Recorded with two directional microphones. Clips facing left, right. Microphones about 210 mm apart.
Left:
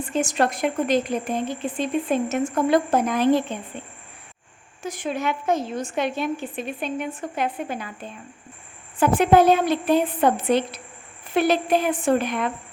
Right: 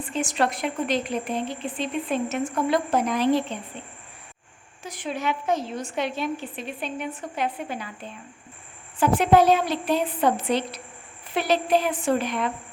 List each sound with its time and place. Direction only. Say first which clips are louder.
0.1 s a woman's voice: left 2 dB; 45° left (ahead or behind)
4.8 s a woman's voice: left 3 dB; 45° left (ahead or behind)
9.0 s a woman's voice: left 2 dB; 50° left (ahead or behind)